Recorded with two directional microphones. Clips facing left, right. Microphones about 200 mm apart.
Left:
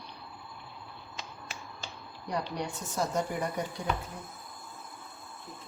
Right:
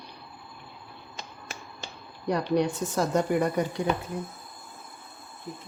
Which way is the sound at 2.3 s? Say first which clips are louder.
Right 9 dB; 85° right.